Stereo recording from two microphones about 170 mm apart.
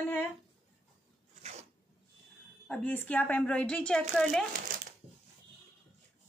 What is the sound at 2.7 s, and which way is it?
Speech, 10° left (ahead or behind).